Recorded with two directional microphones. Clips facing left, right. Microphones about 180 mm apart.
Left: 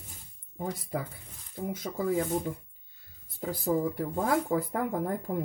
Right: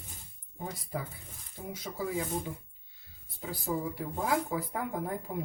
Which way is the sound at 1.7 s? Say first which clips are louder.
Left 5 dB; 50° left (ahead or behind).